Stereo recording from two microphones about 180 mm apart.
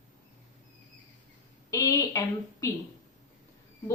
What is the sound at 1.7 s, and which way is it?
Speech, 20° left (ahead or behind).